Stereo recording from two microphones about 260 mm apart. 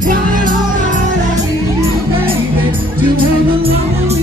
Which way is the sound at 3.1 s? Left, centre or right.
Right.